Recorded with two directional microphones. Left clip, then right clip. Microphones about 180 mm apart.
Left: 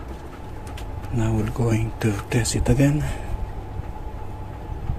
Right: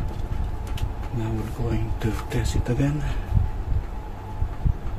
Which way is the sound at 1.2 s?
30° left (ahead or behind).